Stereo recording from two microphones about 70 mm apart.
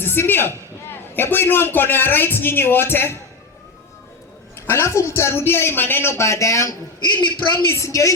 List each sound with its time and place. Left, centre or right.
0.0 s a man's voice: left
4.7 s a man's voice: left
7.0 s a man's voice: left
7.7 s a woman's voice: left